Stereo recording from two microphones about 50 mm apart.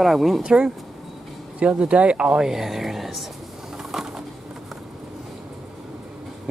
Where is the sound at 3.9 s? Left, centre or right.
Centre.